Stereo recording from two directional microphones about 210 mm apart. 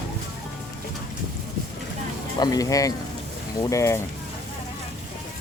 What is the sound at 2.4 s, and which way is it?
Speech, 15° left (ahead or behind).